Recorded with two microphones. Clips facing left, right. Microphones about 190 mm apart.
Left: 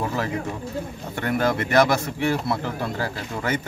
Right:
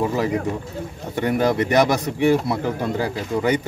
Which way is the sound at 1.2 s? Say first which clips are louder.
Right 4 dB; 15° right (ahead or behind).